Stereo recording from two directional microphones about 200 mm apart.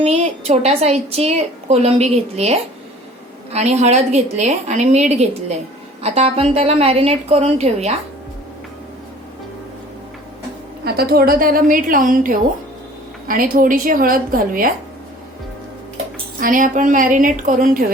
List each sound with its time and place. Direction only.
0.0 s a woman's voice: 30° right (ahead or behind)
10.8 s a woman's voice: 50° right (ahead or behind)
16.4 s a woman's voice: 40° right (ahead or behind)